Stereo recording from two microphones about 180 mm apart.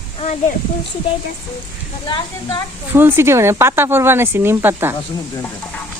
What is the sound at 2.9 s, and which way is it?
Speech, 10° right (ahead or behind).